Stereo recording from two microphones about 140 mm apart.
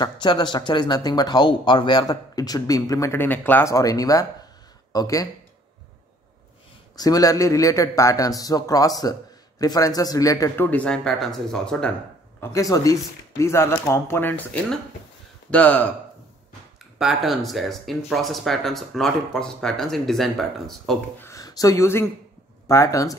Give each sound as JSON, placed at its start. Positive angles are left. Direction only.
{"t": 0.0, "sound": "speech", "side_deg": 35}
{"t": 7.0, "sound": "speech", "side_deg": 25}
{"t": 10.7, "sound": "speech", "side_deg": 10}
{"t": 12.4, "sound": "speech", "side_deg": 25}
{"t": 17.0, "sound": "speech", "side_deg": 0}
{"t": 21.2, "sound": "speech", "side_deg": 25}